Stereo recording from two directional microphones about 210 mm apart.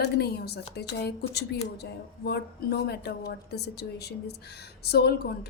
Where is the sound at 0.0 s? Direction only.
50° left (ahead or behind).